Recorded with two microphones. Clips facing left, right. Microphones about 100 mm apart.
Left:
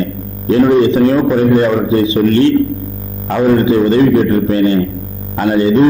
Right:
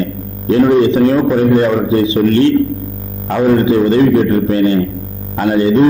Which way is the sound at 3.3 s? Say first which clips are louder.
Even; 20° left (ahead or behind).